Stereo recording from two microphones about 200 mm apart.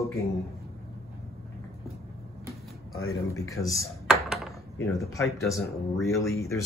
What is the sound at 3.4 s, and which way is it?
Speech, 15° left (ahead or behind).